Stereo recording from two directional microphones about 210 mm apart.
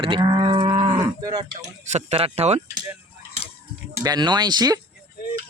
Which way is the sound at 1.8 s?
30° right (ahead or behind).